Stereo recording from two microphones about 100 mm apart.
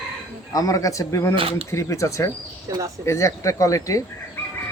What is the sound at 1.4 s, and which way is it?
Speech, 70° right (ahead or behind).